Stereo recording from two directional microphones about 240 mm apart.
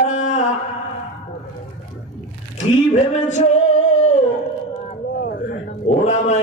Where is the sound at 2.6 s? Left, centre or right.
Left.